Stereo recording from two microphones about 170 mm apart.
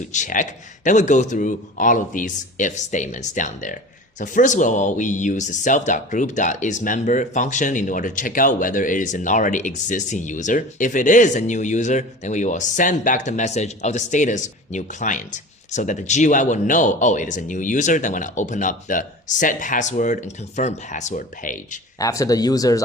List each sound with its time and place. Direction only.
0.1 s speech: 45° left (ahead or behind)
21.9 s speech: 20° left (ahead or behind)